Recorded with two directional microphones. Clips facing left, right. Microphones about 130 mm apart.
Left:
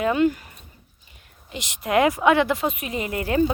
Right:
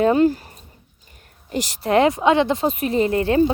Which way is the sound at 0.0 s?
35° right (ahead or behind).